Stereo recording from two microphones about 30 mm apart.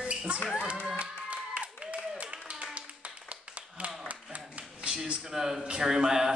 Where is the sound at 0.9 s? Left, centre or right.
Right.